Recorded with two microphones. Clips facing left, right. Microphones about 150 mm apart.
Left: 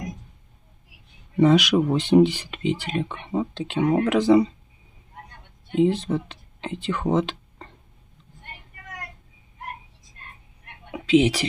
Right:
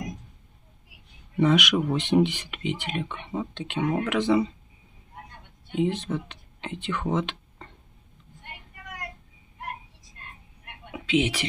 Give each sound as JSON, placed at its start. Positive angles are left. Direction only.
{"t": 1.4, "sound": "speech", "side_deg": 35}
{"t": 5.8, "sound": "speech", "side_deg": 35}
{"t": 10.9, "sound": "a sound", "side_deg": 35}